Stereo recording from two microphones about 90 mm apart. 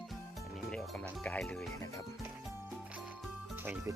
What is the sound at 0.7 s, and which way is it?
Music, 10° left (ahead or behind).